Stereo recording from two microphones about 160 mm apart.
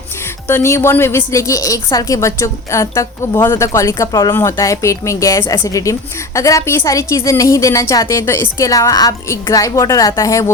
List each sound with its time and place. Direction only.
0.4 s a woman's voice: 15° left (ahead or behind)